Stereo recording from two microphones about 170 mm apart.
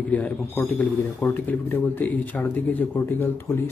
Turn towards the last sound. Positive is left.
turn(degrees=10)  # may be behind; listen again after turning